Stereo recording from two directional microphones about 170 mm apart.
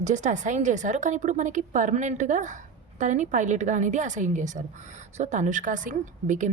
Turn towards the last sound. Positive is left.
turn(degrees=-45)  # may be behind; listen again after turning